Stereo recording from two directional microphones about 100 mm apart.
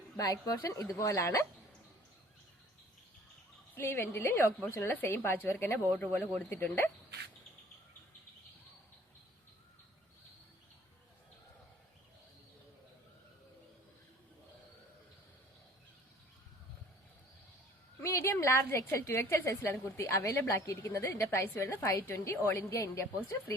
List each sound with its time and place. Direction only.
0.2 s speech: 35° left (ahead or behind)
3.8 s a woman's voice: 25° left (ahead or behind)
18.0 s a woman's voice: 25° left (ahead or behind)